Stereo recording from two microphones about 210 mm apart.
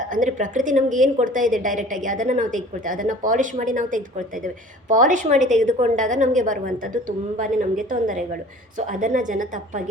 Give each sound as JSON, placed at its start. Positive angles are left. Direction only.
{"t": 0.1, "sound": "a woman's voice", "side_deg": -40}